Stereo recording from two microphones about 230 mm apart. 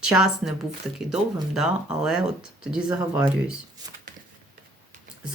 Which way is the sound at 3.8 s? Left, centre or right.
Centre.